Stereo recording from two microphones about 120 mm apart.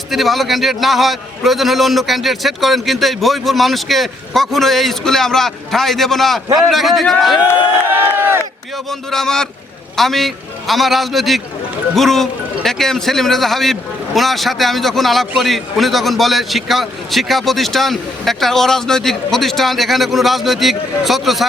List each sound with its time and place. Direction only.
0.1 s a man's voice: centre (ahead or behind)
7.9 s run: 20° right (ahead or behind)
8.9 s a man's voice: 5° left (ahead or behind)